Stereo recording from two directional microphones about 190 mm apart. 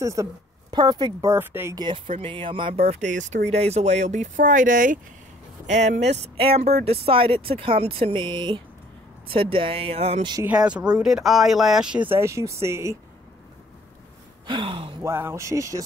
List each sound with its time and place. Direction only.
0.0 s speech: 15° right (ahead or behind)
10.3 s speech: 10° right (ahead or behind)
14.4 s speech: 25° right (ahead or behind)
15.0 s speech: 15° right (ahead or behind)